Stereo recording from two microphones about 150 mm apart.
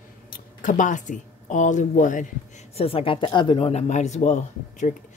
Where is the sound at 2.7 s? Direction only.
40° left (ahead or behind).